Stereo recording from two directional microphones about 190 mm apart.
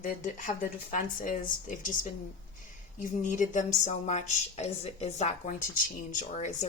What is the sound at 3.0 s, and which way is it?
A woman's voice, 40° left (ahead or behind).